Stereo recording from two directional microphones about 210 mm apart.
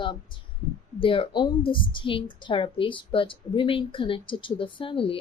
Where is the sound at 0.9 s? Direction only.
25° left (ahead or behind).